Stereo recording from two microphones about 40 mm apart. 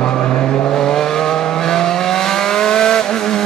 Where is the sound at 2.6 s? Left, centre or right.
Centre.